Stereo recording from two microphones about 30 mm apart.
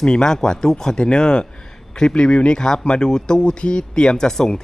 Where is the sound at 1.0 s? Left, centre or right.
Left.